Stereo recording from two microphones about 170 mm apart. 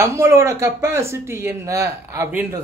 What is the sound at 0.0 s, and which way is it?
Speech, 15° right (ahead or behind).